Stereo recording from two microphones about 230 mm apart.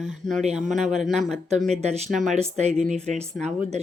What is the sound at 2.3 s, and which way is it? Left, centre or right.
Speech, right.